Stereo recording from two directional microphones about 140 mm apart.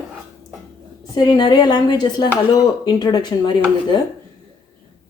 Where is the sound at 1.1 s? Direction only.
30° left (ahead or behind).